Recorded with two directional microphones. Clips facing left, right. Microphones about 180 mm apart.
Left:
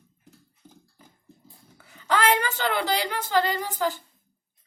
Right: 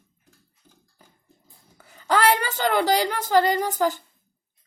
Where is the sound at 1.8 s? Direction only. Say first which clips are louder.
Right 3 dB; 40° right (ahead or behind).